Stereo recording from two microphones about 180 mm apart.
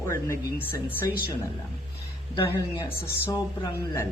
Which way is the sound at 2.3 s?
15° left (ahead or behind).